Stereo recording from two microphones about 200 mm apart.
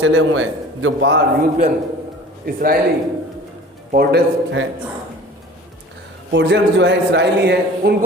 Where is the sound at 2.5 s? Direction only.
45° right (ahead or behind).